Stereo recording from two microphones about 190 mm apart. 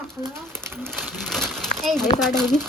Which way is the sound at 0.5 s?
10° right (ahead or behind).